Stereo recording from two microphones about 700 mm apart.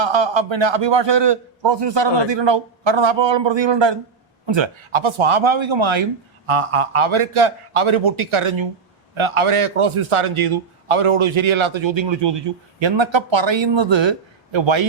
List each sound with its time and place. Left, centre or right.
0.0 s a man's voice: right